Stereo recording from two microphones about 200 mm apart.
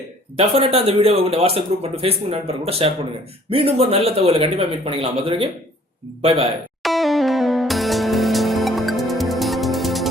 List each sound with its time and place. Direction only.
0.3 s speech: 30° right (ahead or behind)
6.8 s music: centre (ahead or behind)